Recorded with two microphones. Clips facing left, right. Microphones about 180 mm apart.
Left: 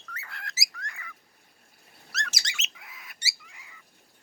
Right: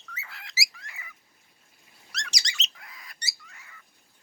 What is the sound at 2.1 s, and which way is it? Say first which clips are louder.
Squeak: left 3 dB; 5° left (ahead or behind).